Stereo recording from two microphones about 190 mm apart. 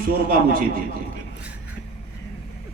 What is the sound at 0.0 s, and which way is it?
Speech, 50° right (ahead or behind).